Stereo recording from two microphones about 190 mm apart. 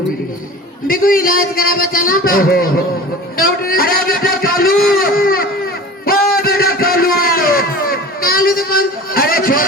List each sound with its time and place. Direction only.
0.9 s a man's voice: 50° left (ahead or behind)
4.8 s baby cry: 50° left (ahead or behind)
6.3 s a sound: 50° left (ahead or behind)